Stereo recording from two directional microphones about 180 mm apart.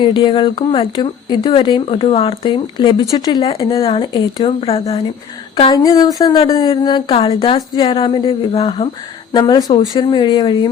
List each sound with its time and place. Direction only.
0.0 s speech: 25° left (ahead or behind)
5.7 s speech: 20° left (ahead or behind)